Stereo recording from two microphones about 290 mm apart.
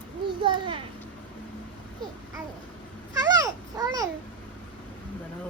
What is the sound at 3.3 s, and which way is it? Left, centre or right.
Babbling, centre.